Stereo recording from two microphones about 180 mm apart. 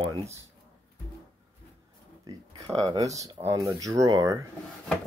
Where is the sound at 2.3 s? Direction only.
20° right (ahead or behind).